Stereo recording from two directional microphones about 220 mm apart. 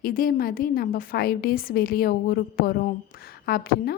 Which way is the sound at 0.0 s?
40° left (ahead or behind).